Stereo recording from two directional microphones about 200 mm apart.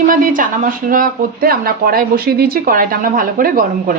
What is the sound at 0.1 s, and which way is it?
Speech, 45° right (ahead or behind).